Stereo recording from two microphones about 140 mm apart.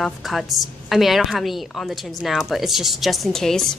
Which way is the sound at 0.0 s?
Centre (ahead or behind).